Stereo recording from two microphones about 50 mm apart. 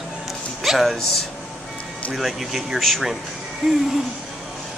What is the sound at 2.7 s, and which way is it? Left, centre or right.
Speech, centre.